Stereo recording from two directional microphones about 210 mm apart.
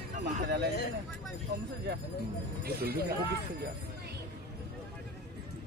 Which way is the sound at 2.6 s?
50° right (ahead or behind).